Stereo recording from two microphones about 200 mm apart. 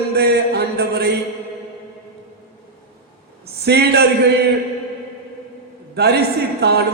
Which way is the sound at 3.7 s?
55° right (ahead or behind).